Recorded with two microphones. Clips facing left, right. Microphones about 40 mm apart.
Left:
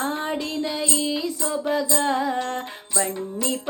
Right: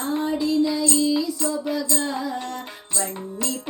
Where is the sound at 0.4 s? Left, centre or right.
Left.